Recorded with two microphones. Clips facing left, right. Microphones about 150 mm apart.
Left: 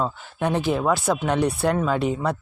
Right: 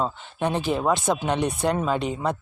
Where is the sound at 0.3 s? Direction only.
20° right (ahead or behind).